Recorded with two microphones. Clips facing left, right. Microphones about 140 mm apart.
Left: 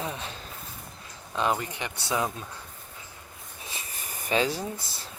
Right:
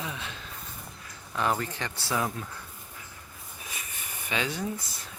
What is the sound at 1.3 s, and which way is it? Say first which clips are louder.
A man's voice: left 1 dB; 20° left (ahead or behind).